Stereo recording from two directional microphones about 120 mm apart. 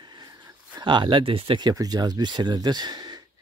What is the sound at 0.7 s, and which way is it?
Speech, 40° right (ahead or behind).